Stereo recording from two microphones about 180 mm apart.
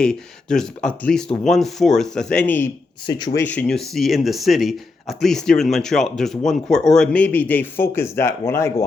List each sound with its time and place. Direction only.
0.0 s speech: 5° left (ahead or behind)
3.1 s speech: 25° left (ahead or behind)
3.4 s speech: 10° left (ahead or behind)